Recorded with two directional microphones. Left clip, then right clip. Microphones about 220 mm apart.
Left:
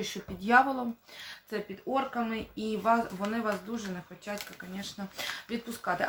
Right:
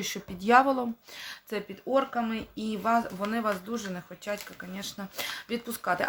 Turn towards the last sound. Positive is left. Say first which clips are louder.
# right 3 dB
turn(degrees=-45)  # may be behind; listen again after turning